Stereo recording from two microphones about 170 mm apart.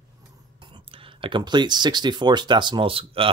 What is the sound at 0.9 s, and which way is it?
Speech, 30° right (ahead or behind).